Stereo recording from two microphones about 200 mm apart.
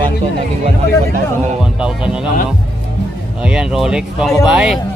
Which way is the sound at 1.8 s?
5° right (ahead or behind).